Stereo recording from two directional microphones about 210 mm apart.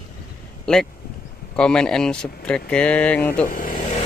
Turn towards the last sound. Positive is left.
turn(degrees=40)  # may be behind; listen again after turning